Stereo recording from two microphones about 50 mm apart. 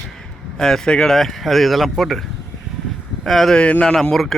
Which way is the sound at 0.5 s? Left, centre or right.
Centre.